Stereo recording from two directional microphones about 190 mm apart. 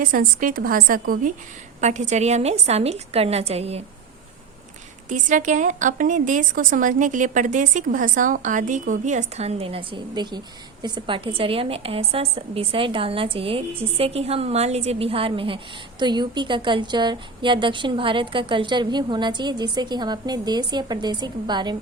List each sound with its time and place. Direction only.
0.0 s a woman's voice: 45° right (ahead or behind)
1.8 s a woman's voice: 40° right (ahead or behind)
5.0 s a woman's voice: 40° right (ahead or behind); by 21.8 s 25° right (ahead or behind)